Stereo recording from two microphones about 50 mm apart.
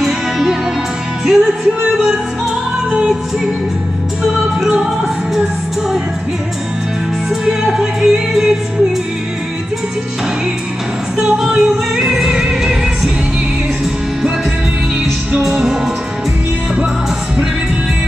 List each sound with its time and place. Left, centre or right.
0.0 s music: centre
7.2 s music: centre
11.1 s music: centre
15.4 s music: centre